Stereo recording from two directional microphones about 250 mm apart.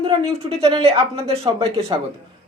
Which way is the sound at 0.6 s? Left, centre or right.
Right.